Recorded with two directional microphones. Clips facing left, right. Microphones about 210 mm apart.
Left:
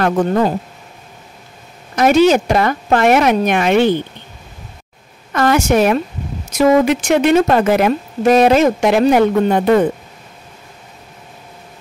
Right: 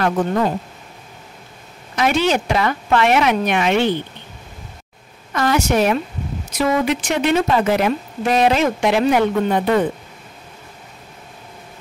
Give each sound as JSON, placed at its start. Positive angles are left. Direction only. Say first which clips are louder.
{"t": 0.0, "sound": "speech", "louder": "left 4 dB", "side_deg": 40}
{"t": 2.0, "sound": "speech", "louder": "left 7 dB", "side_deg": 45}
{"t": 5.3, "sound": "speech", "louder": "left 4 dB", "side_deg": 50}